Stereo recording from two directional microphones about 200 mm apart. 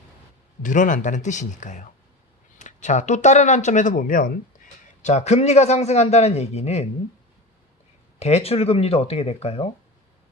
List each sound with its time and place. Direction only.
0.6 s a man's voice: 40° left (ahead or behind)
8.2 s a man's voice: 30° left (ahead or behind)